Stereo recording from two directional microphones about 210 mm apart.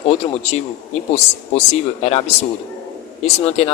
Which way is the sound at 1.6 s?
30° left (ahead or behind).